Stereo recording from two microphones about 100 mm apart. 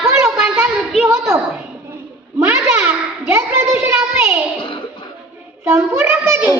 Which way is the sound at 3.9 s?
20° right (ahead or behind).